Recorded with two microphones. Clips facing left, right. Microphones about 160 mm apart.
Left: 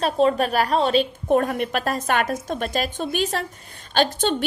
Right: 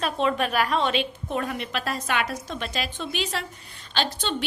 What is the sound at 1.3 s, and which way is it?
A woman's voice, 50° left (ahead or behind).